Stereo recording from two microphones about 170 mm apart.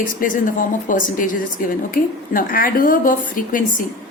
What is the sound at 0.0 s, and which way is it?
A woman's voice, 55° left (ahead or behind).